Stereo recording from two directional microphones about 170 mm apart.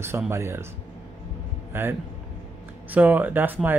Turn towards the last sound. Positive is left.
turn(degrees=-10)  # may be behind; listen again after turning